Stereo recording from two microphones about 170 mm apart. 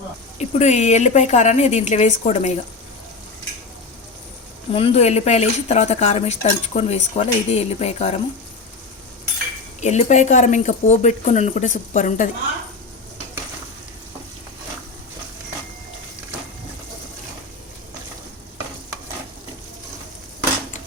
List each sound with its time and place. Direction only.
0.3 s speech: 45° left (ahead or behind)
4.7 s speech: 35° left (ahead or behind)
9.8 s speech: 45° left (ahead or behind)